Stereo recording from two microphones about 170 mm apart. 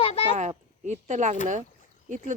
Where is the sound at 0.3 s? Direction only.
45° right (ahead or behind).